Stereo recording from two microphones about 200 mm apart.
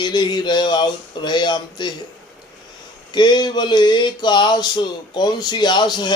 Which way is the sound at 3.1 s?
20° left (ahead or behind).